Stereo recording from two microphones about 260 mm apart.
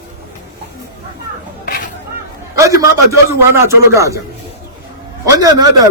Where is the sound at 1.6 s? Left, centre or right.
Left.